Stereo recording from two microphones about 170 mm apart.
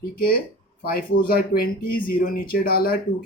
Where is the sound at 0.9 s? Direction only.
60° left (ahead or behind).